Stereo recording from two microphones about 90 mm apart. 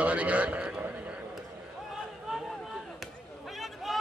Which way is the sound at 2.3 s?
5° right (ahead or behind).